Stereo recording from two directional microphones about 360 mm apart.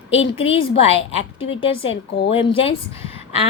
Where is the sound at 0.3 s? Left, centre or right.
Centre.